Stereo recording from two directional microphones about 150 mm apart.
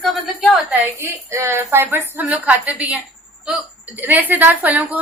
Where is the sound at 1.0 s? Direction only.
20° right (ahead or behind).